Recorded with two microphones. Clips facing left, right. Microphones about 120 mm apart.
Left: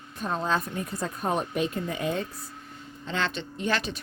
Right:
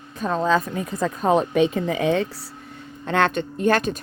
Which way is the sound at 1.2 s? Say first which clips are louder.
Right 9 dB; 90° right.